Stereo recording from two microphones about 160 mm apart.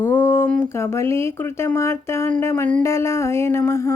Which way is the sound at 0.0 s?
15° left (ahead or behind).